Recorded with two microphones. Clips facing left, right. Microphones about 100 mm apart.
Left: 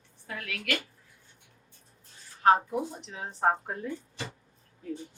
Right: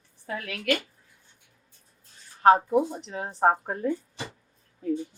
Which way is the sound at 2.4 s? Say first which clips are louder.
Right 5 dB; 40° right (ahead or behind).